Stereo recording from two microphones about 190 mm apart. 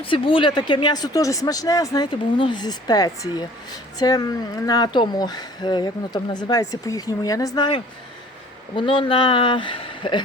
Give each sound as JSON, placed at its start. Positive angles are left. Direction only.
{"t": 0.0, "sound": "speech", "side_deg": 25}